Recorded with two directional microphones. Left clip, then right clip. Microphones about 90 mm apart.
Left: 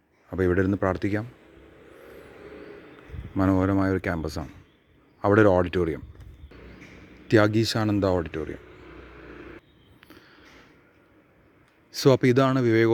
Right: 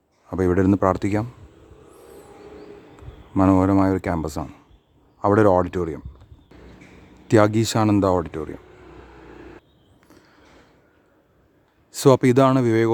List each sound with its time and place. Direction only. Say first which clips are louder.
0.3 s speech: right 4 dB; 30° right (ahead or behind)
3.3 s speech: right 6 dB; 25° right (ahead or behind)
5.6 s speech: even; centre (ahead or behind)
7.3 s speech: right 3 dB; 35° right (ahead or behind)
10.1 s a sound: left 1 dB; centre (ahead or behind)
11.9 s speech: right 4 dB; 35° right (ahead or behind)